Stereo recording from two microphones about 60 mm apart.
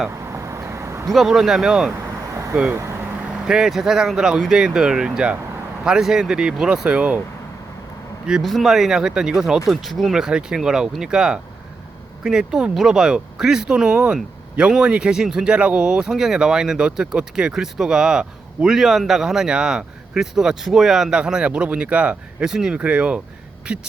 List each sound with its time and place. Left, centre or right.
0.3 s a sound: right
1.1 s a man's voice: centre
6.8 s speech: centre
8.3 s speech: centre